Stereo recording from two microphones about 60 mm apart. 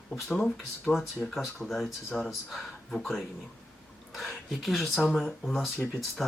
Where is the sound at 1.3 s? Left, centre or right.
Centre.